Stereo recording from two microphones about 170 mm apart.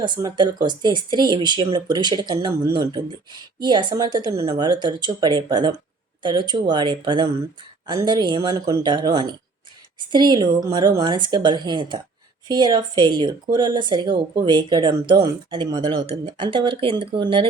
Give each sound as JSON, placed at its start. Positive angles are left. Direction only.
{"t": 0.0, "sound": "speech", "side_deg": -25}